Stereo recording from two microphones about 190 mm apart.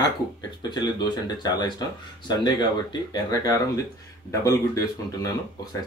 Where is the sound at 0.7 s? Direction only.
20° left (ahead or behind).